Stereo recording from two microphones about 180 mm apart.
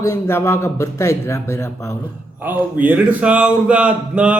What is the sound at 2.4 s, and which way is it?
Speech, 10° right (ahead or behind).